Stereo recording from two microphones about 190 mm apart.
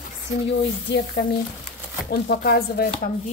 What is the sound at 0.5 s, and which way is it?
Speech, 65° left (ahead or behind).